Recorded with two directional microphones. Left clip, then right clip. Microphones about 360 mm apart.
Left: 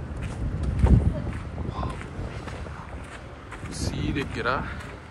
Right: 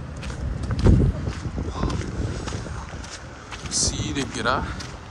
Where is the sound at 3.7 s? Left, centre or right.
Centre.